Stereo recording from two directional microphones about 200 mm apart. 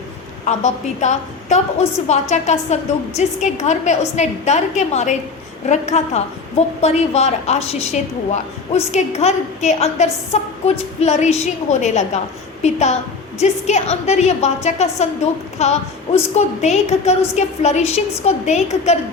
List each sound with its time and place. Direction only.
0.4 s a woman's voice: 35° left (ahead or behind)